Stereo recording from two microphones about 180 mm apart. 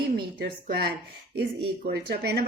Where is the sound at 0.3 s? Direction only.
65° right (ahead or behind).